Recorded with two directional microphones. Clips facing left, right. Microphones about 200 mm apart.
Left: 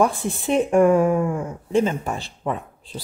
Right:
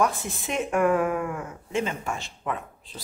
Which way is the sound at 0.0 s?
30° left (ahead or behind).